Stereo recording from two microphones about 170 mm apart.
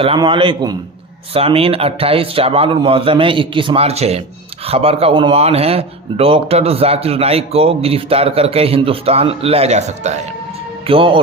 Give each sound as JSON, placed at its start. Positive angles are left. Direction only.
{"t": 0.0, "sound": "a man's voice", "side_deg": -30}
{"t": 10.8, "sound": "a man's voice", "side_deg": -30}